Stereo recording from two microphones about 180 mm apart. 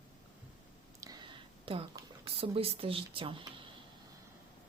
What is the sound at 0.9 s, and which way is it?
Whispering, 25° right (ahead or behind).